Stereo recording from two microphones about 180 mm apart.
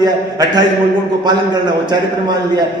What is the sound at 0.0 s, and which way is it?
A man's voice, 20° right (ahead or behind).